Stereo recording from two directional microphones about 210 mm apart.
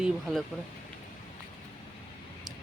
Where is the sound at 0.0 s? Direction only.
Centre (ahead or behind).